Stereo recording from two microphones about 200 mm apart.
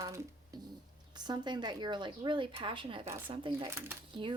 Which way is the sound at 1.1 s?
20° right (ahead or behind).